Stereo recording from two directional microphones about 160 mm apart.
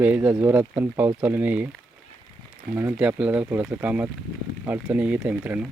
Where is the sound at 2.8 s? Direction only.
10° right (ahead or behind).